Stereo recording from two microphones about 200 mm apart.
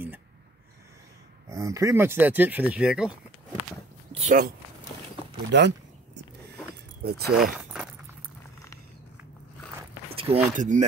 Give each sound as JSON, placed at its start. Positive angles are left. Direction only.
{"t": 1.5, "sound": "speech", "side_deg": -15}
{"t": 4.1, "sound": "a sound", "side_deg": -30}
{"t": 5.5, "sound": "a sound", "side_deg": -60}
{"t": 7.0, "sound": "speech", "side_deg": -50}
{"t": 7.5, "sound": "keys jangling", "side_deg": -5}
{"t": 10.1, "sound": "speech", "side_deg": -30}